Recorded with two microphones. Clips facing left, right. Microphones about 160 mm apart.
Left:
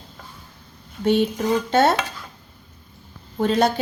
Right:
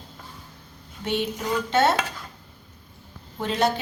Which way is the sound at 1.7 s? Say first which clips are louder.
Left 2 dB; 40° left (ahead or behind).